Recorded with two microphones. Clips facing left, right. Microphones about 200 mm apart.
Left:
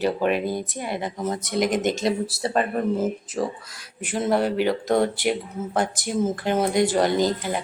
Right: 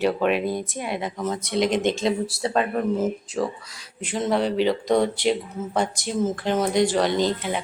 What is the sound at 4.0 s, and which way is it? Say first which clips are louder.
A woman's voice: left 1 dB; 10° left (ahead or behind).